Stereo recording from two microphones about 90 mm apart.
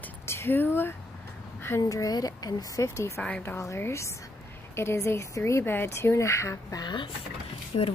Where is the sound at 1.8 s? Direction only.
40° left (ahead or behind).